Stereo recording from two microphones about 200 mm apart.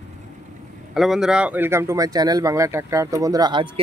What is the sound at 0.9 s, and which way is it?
Speech, centre (ahead or behind).